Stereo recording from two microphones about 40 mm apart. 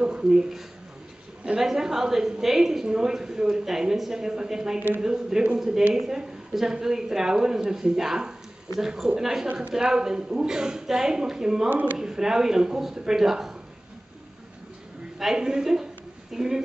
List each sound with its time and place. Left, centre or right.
0.0 s a woman's voice: right
15.1 s a woman's voice: centre